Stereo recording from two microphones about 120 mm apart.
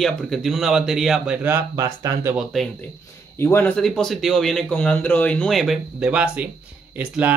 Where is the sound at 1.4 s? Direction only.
25° right (ahead or behind).